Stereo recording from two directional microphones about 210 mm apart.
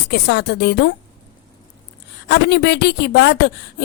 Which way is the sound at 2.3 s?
55° left (ahead or behind).